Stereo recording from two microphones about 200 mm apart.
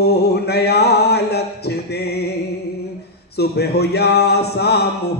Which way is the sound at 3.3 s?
55° left (ahead or behind).